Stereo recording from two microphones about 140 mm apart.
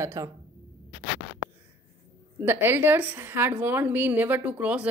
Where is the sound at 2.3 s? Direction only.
15° right (ahead or behind).